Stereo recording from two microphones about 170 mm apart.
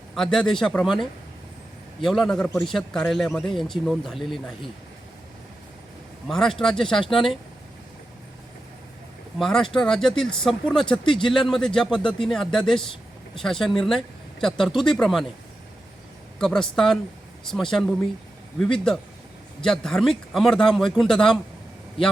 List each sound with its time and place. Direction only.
0.2 s speech: centre (ahead or behind)
6.2 s speech: 5° left (ahead or behind)
9.4 s speech: centre (ahead or behind)
16.4 s speech: 5° left (ahead or behind)
19.6 s speech: 5° left (ahead or behind)